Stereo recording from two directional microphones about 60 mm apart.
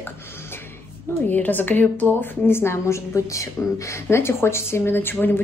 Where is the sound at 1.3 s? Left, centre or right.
Left.